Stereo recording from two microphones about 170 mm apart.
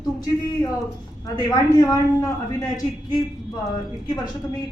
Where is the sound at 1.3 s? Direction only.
20° left (ahead or behind).